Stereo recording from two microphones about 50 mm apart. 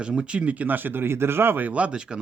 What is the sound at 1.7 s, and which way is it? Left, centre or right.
Speech, right.